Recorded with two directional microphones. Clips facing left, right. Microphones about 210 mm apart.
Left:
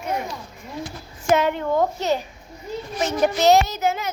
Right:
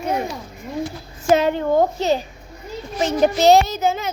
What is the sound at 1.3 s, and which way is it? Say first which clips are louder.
A woman's voice: right 3 dB; 30° right (ahead or behind).